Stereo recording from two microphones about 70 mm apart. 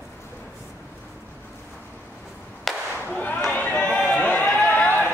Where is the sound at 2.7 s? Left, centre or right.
Centre.